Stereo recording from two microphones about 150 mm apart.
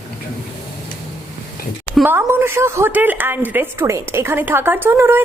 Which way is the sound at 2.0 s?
15° right (ahead or behind).